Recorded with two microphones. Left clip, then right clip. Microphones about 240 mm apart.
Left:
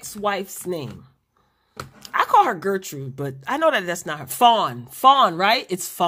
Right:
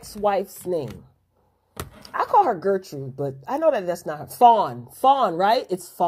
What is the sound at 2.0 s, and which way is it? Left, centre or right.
Speech, left.